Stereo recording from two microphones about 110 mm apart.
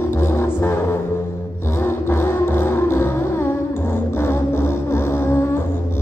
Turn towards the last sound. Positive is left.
turn(degrees=20)  # may be behind; listen again after turning